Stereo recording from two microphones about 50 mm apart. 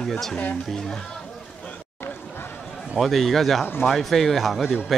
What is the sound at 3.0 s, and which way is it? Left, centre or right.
Speech, centre.